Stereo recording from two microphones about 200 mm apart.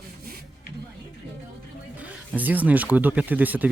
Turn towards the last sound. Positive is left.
turn(degrees=-10)  # may be behind; listen again after turning